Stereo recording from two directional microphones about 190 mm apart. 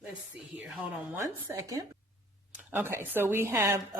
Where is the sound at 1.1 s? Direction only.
15° right (ahead or behind).